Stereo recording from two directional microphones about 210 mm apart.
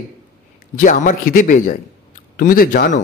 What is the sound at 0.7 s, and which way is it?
A man's voice, 40° left (ahead or behind).